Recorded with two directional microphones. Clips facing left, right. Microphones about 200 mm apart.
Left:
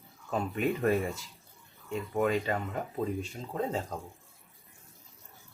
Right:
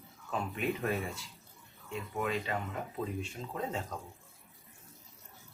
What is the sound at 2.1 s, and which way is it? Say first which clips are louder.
Speech: left 6 dB; 45° left (ahead or behind).